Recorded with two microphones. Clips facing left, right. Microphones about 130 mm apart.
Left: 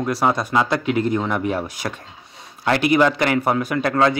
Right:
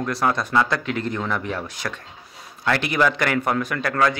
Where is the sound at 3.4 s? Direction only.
15° left (ahead or behind).